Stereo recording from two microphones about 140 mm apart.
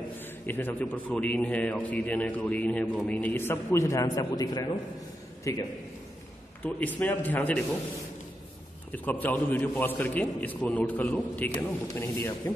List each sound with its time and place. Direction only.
0.5 s a man's voice: 15° left (ahead or behind)
6.6 s a man's voice: 10° left (ahead or behind)
8.9 s a man's voice: 10° left (ahead or behind)